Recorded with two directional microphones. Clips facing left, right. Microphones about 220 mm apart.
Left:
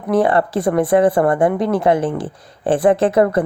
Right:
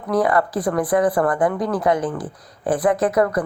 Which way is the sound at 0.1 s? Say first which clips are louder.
Left 3 dB; 25° left (ahead or behind).